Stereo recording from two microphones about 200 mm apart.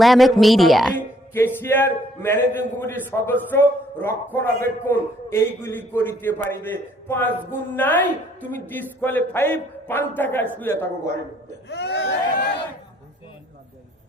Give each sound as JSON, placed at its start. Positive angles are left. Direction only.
{"t": 0.0, "sound": "speech", "side_deg": 0}
{"t": 1.3, "sound": "a man's voice", "side_deg": 10}
{"t": 11.7, "sound": "speech", "side_deg": 60}